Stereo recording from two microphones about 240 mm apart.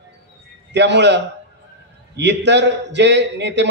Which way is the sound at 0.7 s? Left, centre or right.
Right.